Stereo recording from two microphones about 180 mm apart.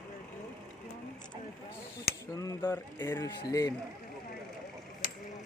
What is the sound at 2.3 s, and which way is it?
Speech, 15° left (ahead or behind).